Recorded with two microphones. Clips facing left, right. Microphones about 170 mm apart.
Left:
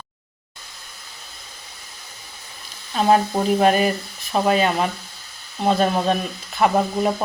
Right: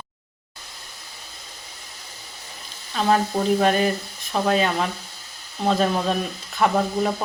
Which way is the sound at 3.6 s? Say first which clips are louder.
Left 2 dB; 10° left (ahead or behind).